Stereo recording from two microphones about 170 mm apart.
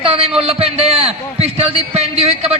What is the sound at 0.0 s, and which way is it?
A man's voice, 35° right (ahead or behind).